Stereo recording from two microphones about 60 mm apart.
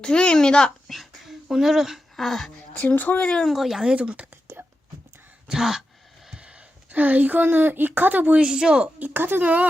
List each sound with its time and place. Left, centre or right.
0.0 s speech: centre
0.9 s dog: centre
2.2 s speech: centre
2.7 s speech: left
3.4 s speech: centre
5.5 s speech: centre; by 8.4 s right
8.4 s speech: centre
9.0 s speech: right